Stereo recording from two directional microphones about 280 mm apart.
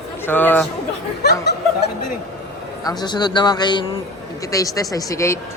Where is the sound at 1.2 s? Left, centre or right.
Left.